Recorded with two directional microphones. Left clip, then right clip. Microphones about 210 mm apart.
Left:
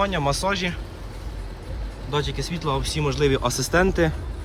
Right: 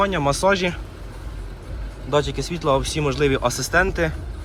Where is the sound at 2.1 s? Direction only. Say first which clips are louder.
Right 5 dB; 10° left (ahead or behind).